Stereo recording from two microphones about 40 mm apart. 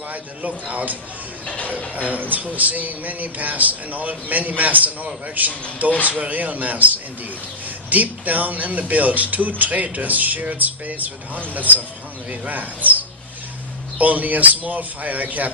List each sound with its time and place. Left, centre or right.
0.1 s speech: right
1.5 s speech: left
2.0 s speech: right